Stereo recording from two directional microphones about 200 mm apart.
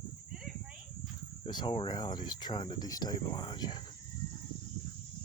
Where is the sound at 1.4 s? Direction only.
25° left (ahead or behind).